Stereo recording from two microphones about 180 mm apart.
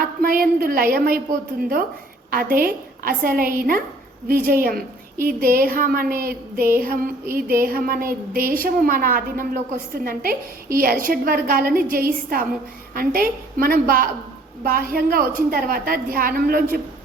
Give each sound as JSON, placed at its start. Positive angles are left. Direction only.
{"t": 0.0, "sound": "a woman's voice", "side_deg": -50}